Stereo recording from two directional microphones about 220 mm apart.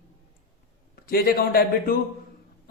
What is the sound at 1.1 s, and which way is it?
Speech, 45° left (ahead or behind).